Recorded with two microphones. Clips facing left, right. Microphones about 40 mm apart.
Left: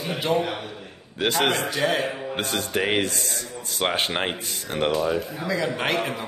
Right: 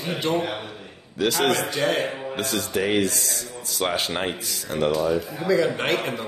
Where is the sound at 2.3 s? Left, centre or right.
Left.